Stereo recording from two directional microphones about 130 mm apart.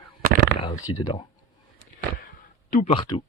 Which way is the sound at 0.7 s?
25° left (ahead or behind).